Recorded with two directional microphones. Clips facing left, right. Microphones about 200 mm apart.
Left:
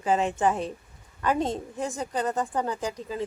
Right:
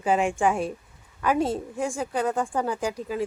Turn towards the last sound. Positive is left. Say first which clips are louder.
# right 3 dB
turn(degrees=-10)  # may be behind; listen again after turning